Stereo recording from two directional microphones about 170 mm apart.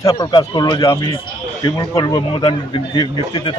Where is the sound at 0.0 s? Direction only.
25° left (ahead or behind).